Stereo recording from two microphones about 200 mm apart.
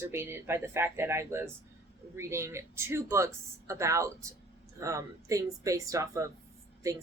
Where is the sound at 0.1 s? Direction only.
10° right (ahead or behind).